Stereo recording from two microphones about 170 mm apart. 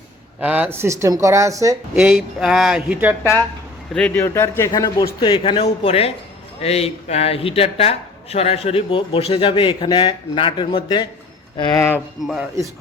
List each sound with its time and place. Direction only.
0.3 s speech: 10° right (ahead or behind)
2.0 s speech: 5° right (ahead or behind)
3.9 s a man's voice: 5° left (ahead or behind)
12.2 s speech: centre (ahead or behind)